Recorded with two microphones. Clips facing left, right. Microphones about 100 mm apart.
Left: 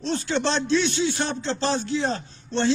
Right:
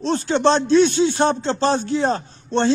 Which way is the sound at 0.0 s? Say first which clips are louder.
Right 7 dB; 40° right (ahead or behind).